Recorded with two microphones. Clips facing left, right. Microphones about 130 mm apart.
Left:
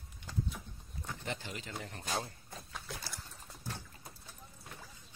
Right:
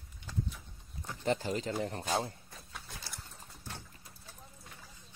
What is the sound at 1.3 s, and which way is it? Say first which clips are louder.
Speech: right 12 dB; 40° right (ahead or behind).